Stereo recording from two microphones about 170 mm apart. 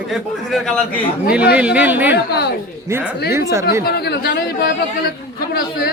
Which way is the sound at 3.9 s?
65° left (ahead or behind).